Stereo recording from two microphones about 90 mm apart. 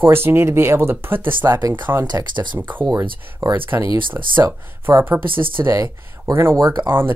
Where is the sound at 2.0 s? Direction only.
55° right (ahead or behind).